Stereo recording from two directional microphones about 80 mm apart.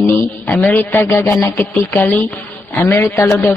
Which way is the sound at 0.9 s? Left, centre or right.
Left.